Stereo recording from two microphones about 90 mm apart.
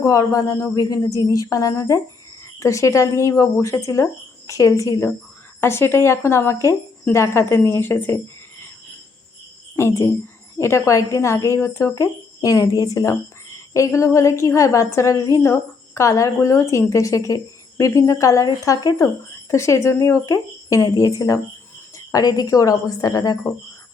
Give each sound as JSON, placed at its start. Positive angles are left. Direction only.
{"t": 0.0, "sound": "a woman's voice", "side_deg": 40}
{"t": 9.7, "sound": "a woman's voice", "side_deg": 30}
{"t": 19.5, "sound": "a woman's voice", "side_deg": 35}